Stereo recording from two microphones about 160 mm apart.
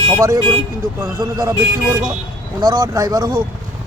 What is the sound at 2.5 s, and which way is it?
Speech, 20° right (ahead or behind).